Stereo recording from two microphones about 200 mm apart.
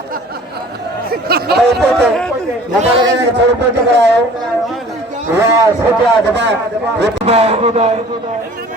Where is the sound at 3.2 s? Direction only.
60° right (ahead or behind).